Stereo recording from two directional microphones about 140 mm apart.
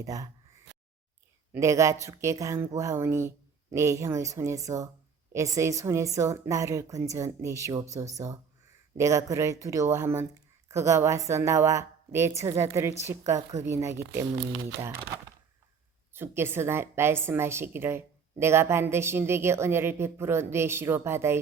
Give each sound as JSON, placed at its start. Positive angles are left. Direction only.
{"t": 0.0, "sound": "speech", "side_deg": -25}
{"t": 1.5, "sound": "speech", "side_deg": -20}
{"t": 16.1, "sound": "a woman's voice", "side_deg": -15}